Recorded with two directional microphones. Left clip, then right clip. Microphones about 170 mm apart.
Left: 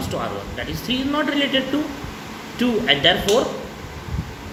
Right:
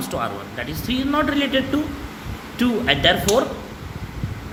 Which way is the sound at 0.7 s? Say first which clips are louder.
Right 1 dB; 50° right (ahead or behind).